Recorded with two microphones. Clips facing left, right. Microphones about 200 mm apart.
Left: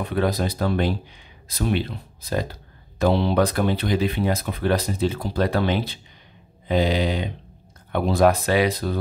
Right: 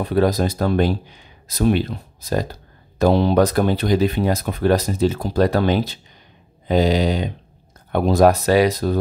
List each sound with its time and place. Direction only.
0.0 s speech: 40° right (ahead or behind)